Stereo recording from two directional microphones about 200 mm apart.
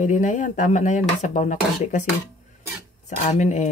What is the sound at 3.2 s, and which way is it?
Speech, 35° left (ahead or behind).